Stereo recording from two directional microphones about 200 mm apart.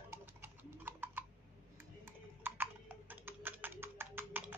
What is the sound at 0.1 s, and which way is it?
Horse, 10° right (ahead or behind).